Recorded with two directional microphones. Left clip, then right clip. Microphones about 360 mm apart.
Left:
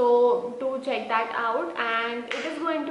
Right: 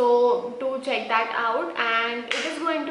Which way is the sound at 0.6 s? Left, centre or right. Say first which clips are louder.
Right 2 dB; centre.